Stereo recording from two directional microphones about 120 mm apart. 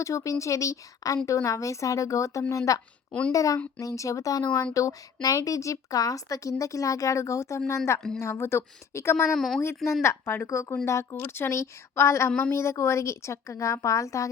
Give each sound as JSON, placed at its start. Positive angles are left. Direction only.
{"t": 0.0, "sound": "a woman's voice", "side_deg": 25}
{"t": 3.1, "sound": "speech", "side_deg": 10}
{"t": 3.3, "sound": "a woman's voice", "side_deg": 30}
{"t": 9.3, "sound": "a woman's voice", "side_deg": 0}
{"t": 9.6, "sound": "a woman's voice", "side_deg": 25}